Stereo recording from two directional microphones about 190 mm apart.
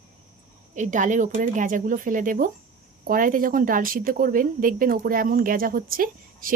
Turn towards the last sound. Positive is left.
turn(degrees=-45)  # may be behind; listen again after turning